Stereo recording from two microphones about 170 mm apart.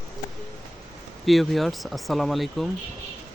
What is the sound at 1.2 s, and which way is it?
A man's voice, centre (ahead or behind).